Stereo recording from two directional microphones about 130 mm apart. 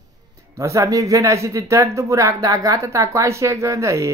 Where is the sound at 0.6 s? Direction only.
25° right (ahead or behind).